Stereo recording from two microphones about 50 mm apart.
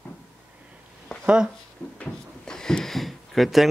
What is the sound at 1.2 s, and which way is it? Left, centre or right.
Speech, centre.